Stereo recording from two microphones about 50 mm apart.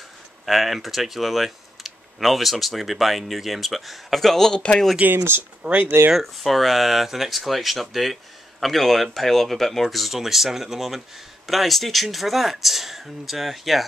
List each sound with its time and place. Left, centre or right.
0.5 s speech: centre
5.0 s speech: right
5.6 s speech: right
6.1 s speech: centre